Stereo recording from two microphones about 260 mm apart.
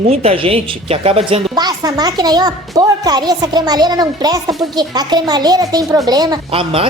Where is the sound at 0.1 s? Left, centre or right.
Right.